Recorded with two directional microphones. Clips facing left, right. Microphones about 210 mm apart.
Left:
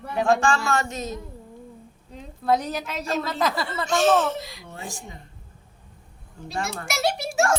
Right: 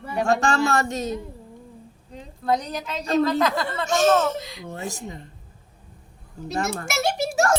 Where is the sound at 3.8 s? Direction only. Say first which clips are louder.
Right 1 dB; 45° right (ahead or behind).